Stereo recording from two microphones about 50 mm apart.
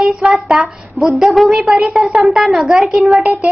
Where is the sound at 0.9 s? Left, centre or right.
Centre.